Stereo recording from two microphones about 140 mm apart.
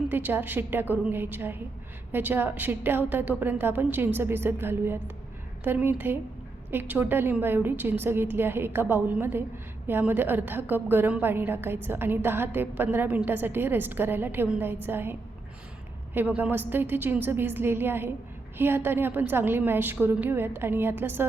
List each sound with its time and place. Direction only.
0.1 s a woman's voice: 15° right (ahead or behind)
16.1 s a woman's voice: 15° right (ahead or behind)